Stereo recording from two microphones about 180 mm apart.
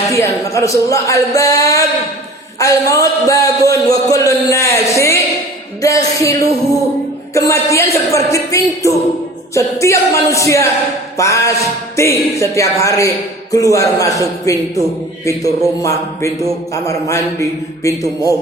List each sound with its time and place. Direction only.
0.1 s a man's voice: 15° left (ahead or behind)
7.3 s a man's voice: 15° left (ahead or behind)